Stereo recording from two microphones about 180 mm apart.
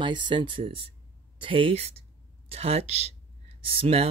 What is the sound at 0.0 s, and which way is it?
Speech, 25° right (ahead or behind).